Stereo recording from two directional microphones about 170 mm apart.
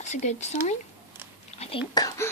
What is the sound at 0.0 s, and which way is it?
Speech, 40° left (ahead or behind).